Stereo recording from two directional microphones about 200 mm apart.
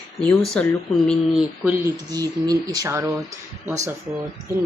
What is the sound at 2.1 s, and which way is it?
Speech, 20° right (ahead or behind).